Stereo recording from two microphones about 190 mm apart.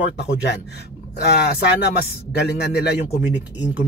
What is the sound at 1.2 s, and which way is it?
A man's voice, 60° left (ahead or behind).